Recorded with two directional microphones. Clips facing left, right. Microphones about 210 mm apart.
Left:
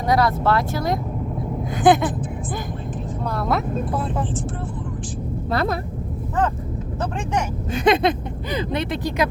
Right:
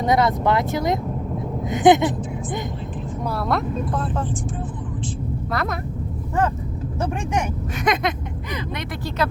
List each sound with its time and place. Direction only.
0.0 s speech: 20° right (ahead or behind)
3.2 s speech: centre (ahead or behind)
5.5 s speech: 30° left (ahead or behind)
7.7 s speech: 30° left (ahead or behind)
9.0 s speech: 15° left (ahead or behind)